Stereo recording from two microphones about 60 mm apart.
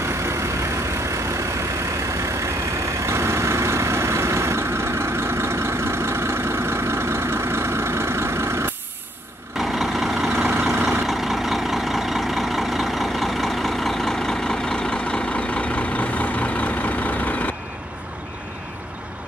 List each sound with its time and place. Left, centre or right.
3.0 s vehicle: right
9.6 s vehicle: centre
10.3 s vehicle: right
10.9 s vehicle: centre; by 17.5 s left